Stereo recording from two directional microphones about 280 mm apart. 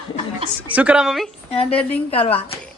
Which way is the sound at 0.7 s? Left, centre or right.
Centre.